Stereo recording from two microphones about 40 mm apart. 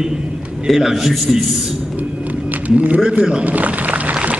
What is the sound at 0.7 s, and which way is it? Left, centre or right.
Speech, centre.